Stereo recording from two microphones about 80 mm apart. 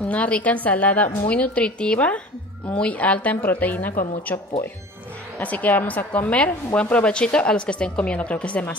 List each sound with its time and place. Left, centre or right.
0.1 s a woman's voice: centre
5.4 s a woman's voice: centre